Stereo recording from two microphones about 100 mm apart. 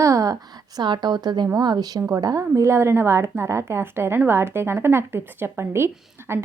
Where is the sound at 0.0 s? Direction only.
35° right (ahead or behind).